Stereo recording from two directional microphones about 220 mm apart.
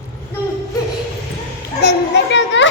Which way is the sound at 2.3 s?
55° left (ahead or behind).